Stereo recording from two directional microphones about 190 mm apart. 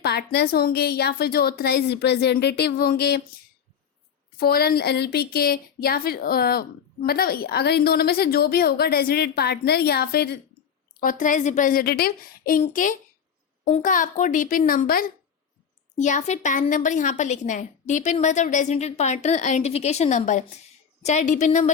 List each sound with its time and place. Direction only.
0.0 s a woman's voice: 60° left (ahead or behind)
4.4 s a woman's voice: 55° left (ahead or behind)
11.0 s a woman's voice: 45° left (ahead or behind)
16.0 s a woman's voice: 40° left (ahead or behind)